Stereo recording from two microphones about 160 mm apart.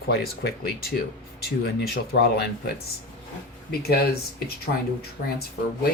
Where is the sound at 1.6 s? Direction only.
85° left.